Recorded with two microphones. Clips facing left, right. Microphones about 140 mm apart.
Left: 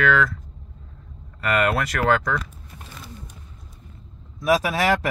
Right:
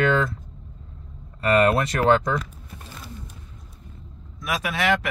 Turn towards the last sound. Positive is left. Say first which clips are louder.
# left 2 dB
turn(degrees=35)  # may be behind; listen again after turning